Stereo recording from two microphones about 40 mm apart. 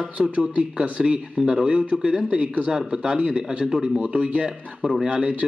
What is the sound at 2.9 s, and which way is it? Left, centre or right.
Speech, right.